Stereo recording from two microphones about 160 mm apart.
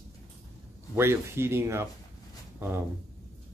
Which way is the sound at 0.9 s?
15° right (ahead or behind).